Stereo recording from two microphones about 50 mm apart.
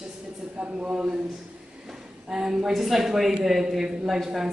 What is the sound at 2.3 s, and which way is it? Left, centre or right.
A woman's voice, centre.